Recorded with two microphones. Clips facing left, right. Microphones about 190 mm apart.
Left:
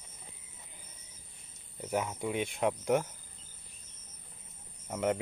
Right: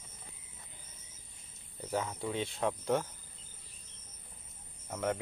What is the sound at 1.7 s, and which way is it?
Speech, 15° left (ahead or behind).